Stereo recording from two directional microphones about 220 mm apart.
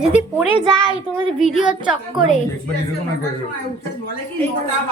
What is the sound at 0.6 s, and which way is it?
Speech, 20° right (ahead or behind).